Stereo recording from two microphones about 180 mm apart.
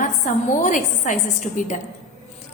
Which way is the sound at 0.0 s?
45° left (ahead or behind).